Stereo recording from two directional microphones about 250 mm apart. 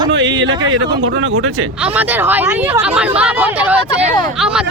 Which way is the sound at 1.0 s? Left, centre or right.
Right.